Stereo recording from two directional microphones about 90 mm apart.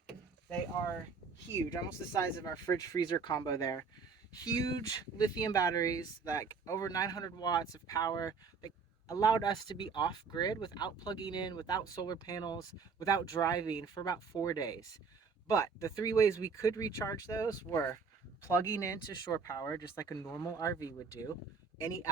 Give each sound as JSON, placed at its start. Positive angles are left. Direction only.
{"t": 2.1, "sound": "speech", "side_deg": 40}